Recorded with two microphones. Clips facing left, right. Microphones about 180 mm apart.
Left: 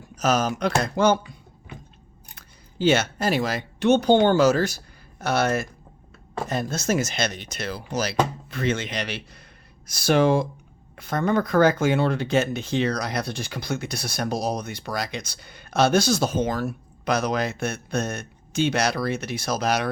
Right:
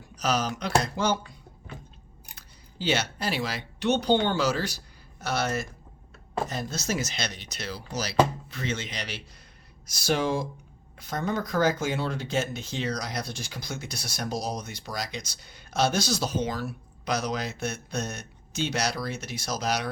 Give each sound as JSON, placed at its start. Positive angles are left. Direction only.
{"t": 0.2, "sound": "speech", "side_deg": 50}
{"t": 2.3, "sound": "speech", "side_deg": 50}